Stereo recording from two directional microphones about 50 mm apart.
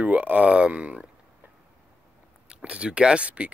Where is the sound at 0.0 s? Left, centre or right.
Right.